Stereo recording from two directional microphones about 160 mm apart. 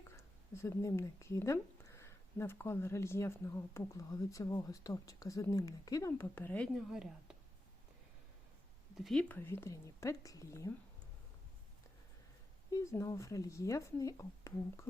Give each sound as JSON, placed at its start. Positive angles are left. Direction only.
{"t": 0.1, "sound": "speech", "side_deg": 15}
{"t": 6.7, "sound": "speech", "side_deg": -5}
{"t": 9.0, "sound": "speech", "side_deg": 0}
{"t": 9.3, "sound": "speech", "side_deg": 15}
{"t": 12.7, "sound": "speech", "side_deg": 20}